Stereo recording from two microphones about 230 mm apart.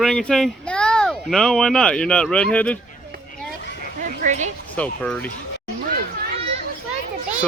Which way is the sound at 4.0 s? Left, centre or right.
Right.